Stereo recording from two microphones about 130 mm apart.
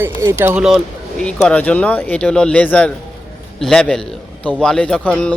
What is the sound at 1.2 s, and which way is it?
A man's voice, 10° left (ahead or behind).